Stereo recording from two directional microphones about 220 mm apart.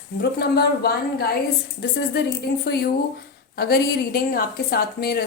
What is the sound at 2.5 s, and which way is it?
Speech, 45° left (ahead or behind).